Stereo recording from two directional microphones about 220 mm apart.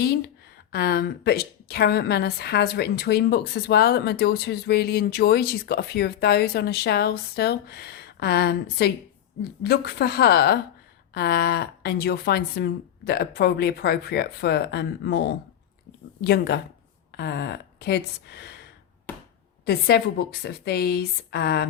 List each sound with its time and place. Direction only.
0.7 s a woman's voice: 45° left (ahead or behind)
19.6 s a woman's voice: 45° left (ahead or behind)